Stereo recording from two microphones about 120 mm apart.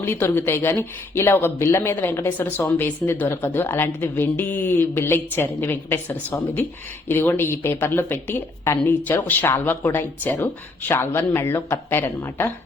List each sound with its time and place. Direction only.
0.0 s a woman's voice: 20° left (ahead or behind)